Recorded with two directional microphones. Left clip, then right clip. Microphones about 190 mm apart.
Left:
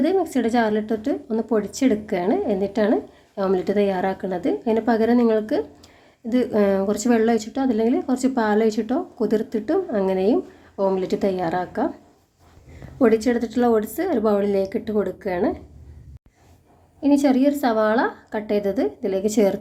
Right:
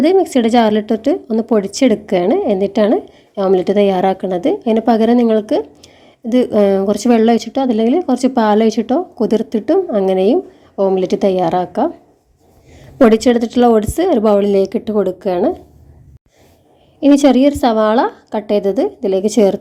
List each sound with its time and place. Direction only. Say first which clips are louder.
0.0 s a woman's voice: right 9 dB; 30° right (ahead or behind)
13.0 s speech: right 8 dB; 35° right (ahead or behind)
17.0 s speech: right 8 dB; 35° right (ahead or behind)